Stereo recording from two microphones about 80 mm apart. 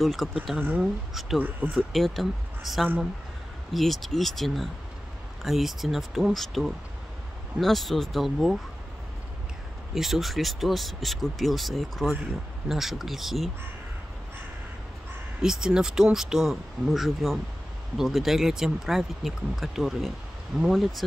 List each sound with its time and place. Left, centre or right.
0.0 s speech: centre
0.6 s speech: centre
1.8 s speech: centre
9.9 s speech: centre
15.4 s speech: centre